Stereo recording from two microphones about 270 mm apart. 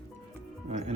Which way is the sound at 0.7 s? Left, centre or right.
Right.